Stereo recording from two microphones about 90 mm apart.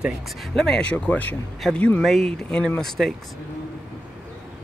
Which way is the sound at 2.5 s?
10° left (ahead or behind).